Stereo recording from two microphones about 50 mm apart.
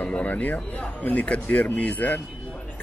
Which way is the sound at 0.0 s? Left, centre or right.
Left.